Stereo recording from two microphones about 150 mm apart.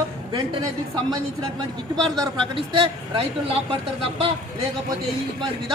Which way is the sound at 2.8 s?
35° right (ahead or behind).